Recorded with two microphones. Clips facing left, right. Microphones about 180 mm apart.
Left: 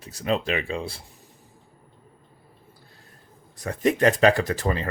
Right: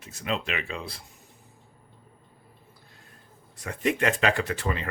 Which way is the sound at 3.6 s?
35° left (ahead or behind).